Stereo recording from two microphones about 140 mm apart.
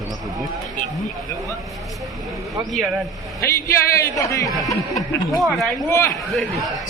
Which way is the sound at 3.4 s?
20° left (ahead or behind).